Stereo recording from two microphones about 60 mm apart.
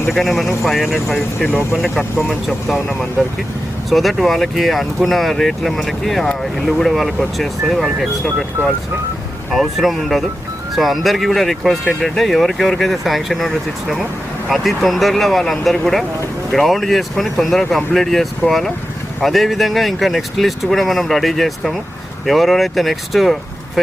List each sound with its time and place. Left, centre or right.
0.1 s speech: centre
2.6 s speech: centre
8.6 s speech: right
9.5 s speech: centre